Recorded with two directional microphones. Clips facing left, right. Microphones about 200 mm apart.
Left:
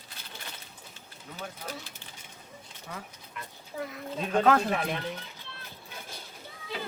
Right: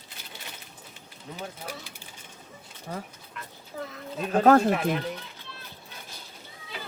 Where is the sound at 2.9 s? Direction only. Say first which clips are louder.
Right 6 dB; 35° right (ahead or behind).